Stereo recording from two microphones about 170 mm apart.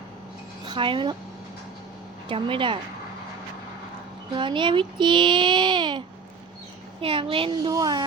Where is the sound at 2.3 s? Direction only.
30° right (ahead or behind).